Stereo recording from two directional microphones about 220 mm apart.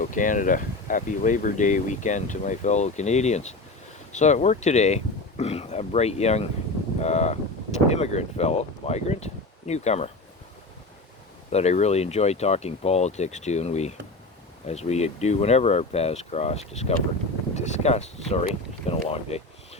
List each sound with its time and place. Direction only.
0.0 s speech: 35° left (ahead or behind)
11.5 s speech: 30° left (ahead or behind)